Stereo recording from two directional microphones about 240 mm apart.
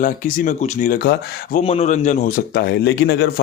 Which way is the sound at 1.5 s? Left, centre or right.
Left.